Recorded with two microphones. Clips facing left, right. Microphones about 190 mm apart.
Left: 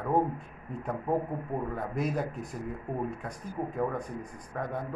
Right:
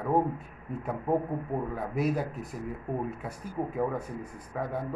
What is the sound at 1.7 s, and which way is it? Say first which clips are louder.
Speech: right 4 dB; centre (ahead or behind).